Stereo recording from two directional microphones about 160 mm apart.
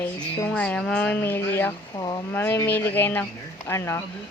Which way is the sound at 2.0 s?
25° left (ahead or behind).